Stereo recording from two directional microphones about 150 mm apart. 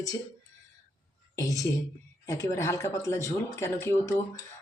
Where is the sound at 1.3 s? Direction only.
25° left (ahead or behind).